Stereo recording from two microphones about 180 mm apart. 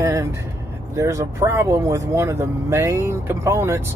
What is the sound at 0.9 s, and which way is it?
Speech, 15° right (ahead or behind).